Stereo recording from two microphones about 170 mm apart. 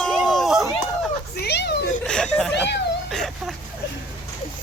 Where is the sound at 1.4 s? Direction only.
75° left (ahead or behind).